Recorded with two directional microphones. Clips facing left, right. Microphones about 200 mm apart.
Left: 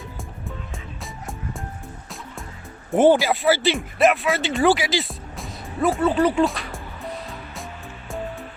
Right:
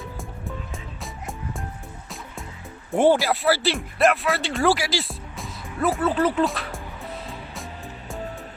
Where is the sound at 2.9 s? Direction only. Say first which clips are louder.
Left 2 dB; centre (ahead or behind).